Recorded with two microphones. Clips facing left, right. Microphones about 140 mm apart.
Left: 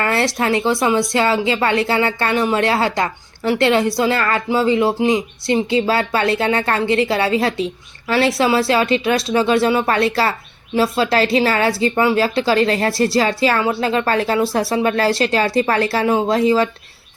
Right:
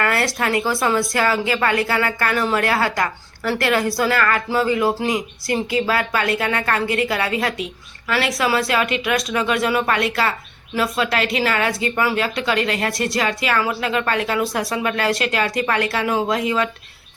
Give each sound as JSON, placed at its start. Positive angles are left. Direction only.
{"t": 0.0, "sound": "a woman's voice", "side_deg": 25}